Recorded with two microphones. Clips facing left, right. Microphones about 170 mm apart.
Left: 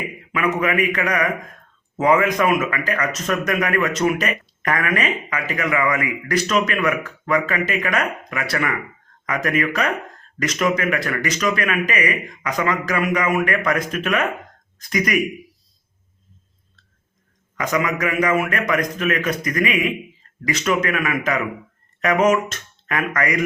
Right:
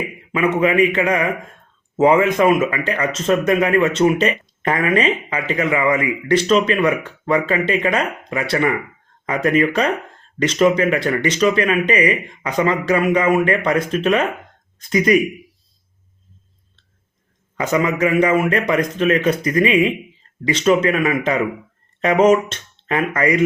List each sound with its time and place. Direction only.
0.3 s speech: 30° right (ahead or behind)
17.6 s speech: 30° right (ahead or behind)